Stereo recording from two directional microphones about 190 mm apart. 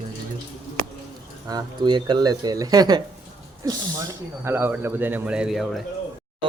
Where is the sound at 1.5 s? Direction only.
20° right (ahead or behind).